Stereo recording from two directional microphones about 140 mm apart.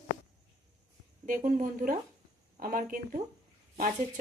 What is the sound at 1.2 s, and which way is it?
Speech, 70° right (ahead or behind).